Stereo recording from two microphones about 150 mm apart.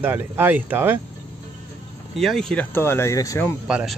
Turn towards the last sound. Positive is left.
turn(degrees=-5)  # may be behind; listen again after turning